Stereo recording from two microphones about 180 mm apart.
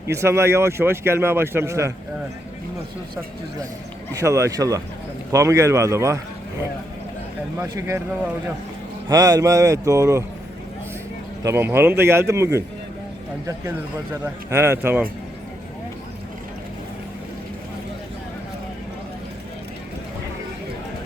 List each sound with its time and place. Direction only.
0.1 s speech: 15° right (ahead or behind)
4.2 s speech: 15° right (ahead or behind)
7.6 s speech: 15° right (ahead or behind)
9.0 s speech: 20° right (ahead or behind)
11.4 s speech: 15° right (ahead or behind)
13.7 s speech: 15° right (ahead or behind)